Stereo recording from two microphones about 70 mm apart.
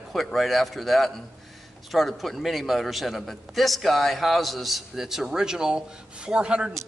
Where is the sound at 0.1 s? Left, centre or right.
Centre.